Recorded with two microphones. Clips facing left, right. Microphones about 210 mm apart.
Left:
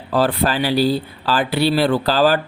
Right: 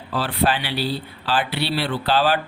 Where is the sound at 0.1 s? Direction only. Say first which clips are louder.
Left 4 dB; 45° left (ahead or behind).